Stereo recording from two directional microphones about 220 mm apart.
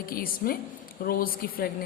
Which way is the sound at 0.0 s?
40° left (ahead or behind).